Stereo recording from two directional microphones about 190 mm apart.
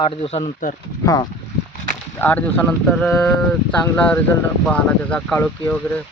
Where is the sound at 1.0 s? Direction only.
20° left (ahead or behind).